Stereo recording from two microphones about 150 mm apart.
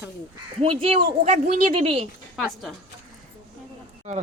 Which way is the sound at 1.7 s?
40° right (ahead or behind).